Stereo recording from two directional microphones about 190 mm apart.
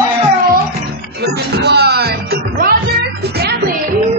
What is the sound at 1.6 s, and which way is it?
Music, 60° right (ahead or behind).